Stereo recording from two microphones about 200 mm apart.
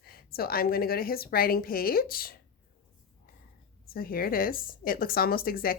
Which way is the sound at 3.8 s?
45° left (ahead or behind).